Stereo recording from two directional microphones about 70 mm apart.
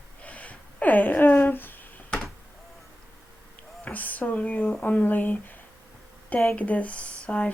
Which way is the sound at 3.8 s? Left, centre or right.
Left.